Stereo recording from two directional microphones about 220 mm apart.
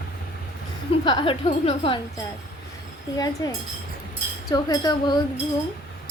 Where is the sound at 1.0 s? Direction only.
20° left (ahead or behind).